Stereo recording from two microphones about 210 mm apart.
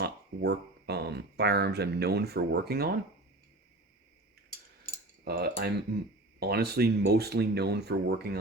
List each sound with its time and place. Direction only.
0.0 s speech: 50° right (ahead or behind)
5.2 s speech: 50° right (ahead or behind)